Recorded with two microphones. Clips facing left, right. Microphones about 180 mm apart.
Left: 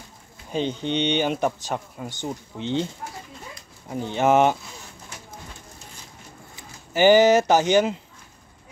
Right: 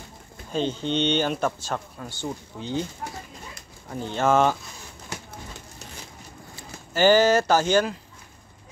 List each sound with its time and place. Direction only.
0.5 s speech: 15° left (ahead or behind)
3.9 s speech: 15° left (ahead or behind)
6.5 s speech: 15° left (ahead or behind)